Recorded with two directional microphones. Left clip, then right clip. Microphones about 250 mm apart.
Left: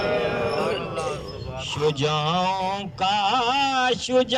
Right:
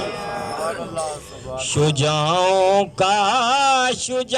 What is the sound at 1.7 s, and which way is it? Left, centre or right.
Music, right.